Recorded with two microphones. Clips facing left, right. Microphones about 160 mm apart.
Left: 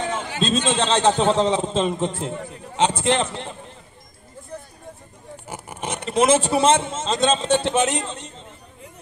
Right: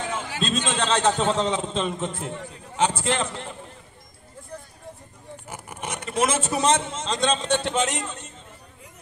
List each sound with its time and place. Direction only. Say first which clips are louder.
0.4 s a man's voice: left 5 dB; 30° left (ahead or behind)
5.5 s speech: left 4 dB; 30° left (ahead or behind)